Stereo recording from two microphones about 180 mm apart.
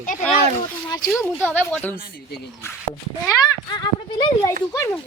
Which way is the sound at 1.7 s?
10° left (ahead or behind).